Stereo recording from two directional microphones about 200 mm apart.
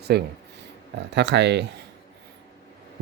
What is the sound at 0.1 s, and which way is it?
Speech, 55° right (ahead or behind).